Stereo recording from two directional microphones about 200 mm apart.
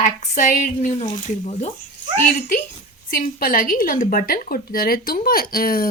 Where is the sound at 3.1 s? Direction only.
45° left (ahead or behind).